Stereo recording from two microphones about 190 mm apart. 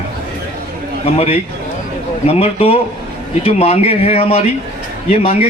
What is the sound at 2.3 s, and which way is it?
Speech, 30° left (ahead or behind).